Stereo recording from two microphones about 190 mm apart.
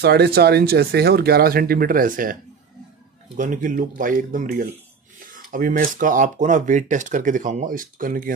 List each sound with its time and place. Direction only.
0.0 s speech: 55° right (ahead or behind)
3.3 s speech: 45° right (ahead or behind)